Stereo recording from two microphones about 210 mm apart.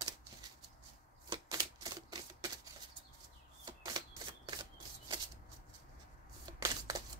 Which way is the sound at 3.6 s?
20° right (ahead or behind).